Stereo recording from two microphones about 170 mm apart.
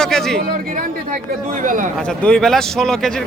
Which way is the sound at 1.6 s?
50° right (ahead or behind).